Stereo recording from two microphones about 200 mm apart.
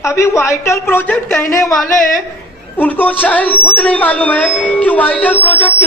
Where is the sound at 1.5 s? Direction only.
15° left (ahead or behind).